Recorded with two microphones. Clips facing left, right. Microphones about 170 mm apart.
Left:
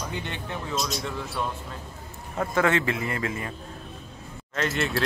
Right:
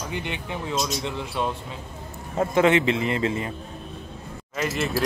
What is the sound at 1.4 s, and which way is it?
A man's voice, 20° right (ahead or behind).